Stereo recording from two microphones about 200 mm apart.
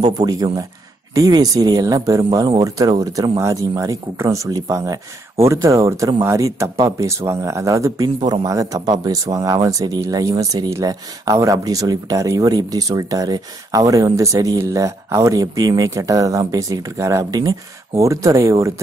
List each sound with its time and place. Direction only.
0.0 s speech: 20° right (ahead or behind)